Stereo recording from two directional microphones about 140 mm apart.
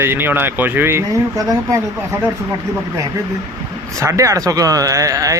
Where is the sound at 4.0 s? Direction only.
20° right (ahead or behind).